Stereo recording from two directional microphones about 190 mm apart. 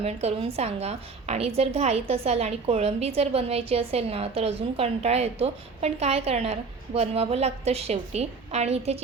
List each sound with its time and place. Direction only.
0.0 s a woman's voice: 35° right (ahead or behind)